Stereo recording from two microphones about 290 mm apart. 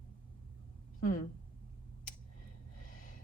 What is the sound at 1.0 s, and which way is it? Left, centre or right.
Speech, left.